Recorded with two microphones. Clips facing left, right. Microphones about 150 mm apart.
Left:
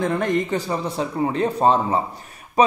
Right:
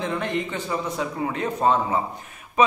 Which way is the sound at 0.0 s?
45° left (ahead or behind).